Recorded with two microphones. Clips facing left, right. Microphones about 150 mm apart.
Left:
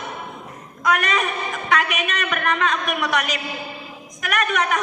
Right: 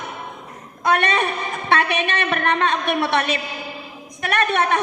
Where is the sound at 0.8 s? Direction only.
30° right (ahead or behind).